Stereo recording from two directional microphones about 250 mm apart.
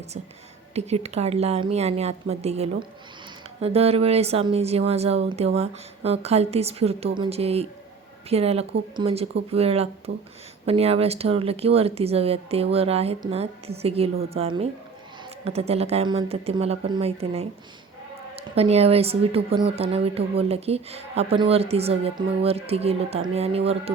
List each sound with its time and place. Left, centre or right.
0.7 s speech: right